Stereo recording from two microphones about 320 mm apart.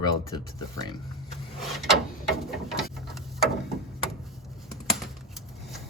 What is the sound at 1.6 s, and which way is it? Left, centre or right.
Speech, centre.